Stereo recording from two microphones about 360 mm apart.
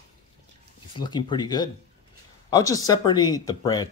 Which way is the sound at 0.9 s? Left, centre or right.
Centre.